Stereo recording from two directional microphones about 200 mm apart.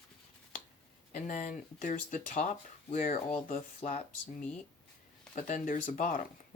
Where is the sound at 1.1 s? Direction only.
40° left (ahead or behind).